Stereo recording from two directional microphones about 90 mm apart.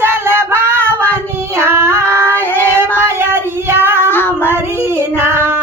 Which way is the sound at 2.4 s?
20° left (ahead or behind).